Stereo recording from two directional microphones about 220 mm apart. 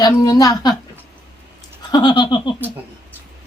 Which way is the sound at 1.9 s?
20° left (ahead or behind).